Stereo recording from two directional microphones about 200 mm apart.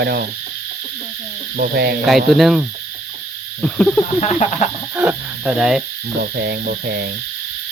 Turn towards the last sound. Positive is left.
turn(degrees=-55)  # may be behind; listen again after turning